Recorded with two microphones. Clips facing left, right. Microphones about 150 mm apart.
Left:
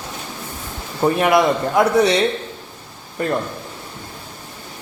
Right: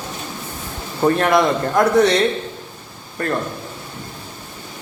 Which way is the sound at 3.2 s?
20° left (ahead or behind).